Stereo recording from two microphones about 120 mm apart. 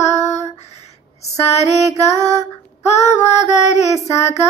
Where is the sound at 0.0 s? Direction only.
70° left (ahead or behind).